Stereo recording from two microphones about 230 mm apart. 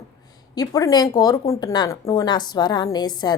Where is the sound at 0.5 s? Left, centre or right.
Centre.